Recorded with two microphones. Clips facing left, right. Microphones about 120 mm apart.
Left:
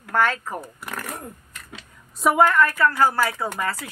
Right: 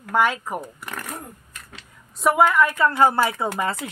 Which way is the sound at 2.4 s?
15° right (ahead or behind).